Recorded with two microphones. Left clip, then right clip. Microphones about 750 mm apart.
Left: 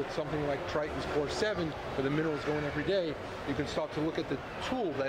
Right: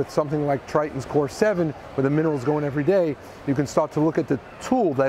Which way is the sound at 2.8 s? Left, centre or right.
Right.